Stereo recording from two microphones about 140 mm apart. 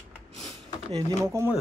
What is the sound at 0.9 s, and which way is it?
Speech, 20° right (ahead or behind).